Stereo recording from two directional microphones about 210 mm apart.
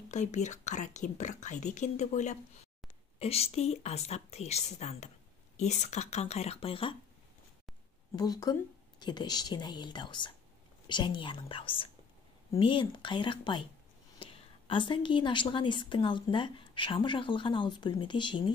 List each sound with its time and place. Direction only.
0.1 s speech: 35° left (ahead or behind)
8.2 s a woman's voice: 20° left (ahead or behind)